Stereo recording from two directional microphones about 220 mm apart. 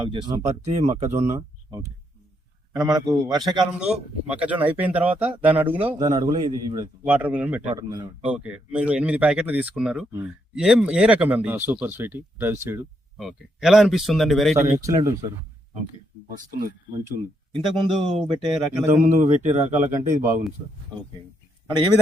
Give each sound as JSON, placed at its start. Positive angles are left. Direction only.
{"t": 0.0, "sound": "speech", "side_deg": -20}
{"t": 0.4, "sound": "speech", "side_deg": -30}
{"t": 2.7, "sound": "speech", "side_deg": -15}
{"t": 3.7, "sound": "speech", "side_deg": -5}
{"t": 6.0, "sound": "speech", "side_deg": -15}
{"t": 7.0, "sound": "speech", "side_deg": -5}
{"t": 8.2, "sound": "speech", "side_deg": -5}
{"t": 14.6, "sound": "speech", "side_deg": -15}
{"t": 16.3, "sound": "speech", "side_deg": -40}
{"t": 17.6, "sound": "speech", "side_deg": 0}
{"t": 18.3, "sound": "speech", "side_deg": -20}
{"t": 19.0, "sound": "speech", "side_deg": -30}
{"t": 19.9, "sound": "speech", "side_deg": -10}